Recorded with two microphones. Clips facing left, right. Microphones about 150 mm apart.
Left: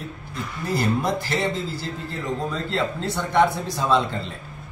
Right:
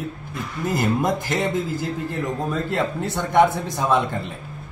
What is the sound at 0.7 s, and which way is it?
A man's voice, 15° right (ahead or behind).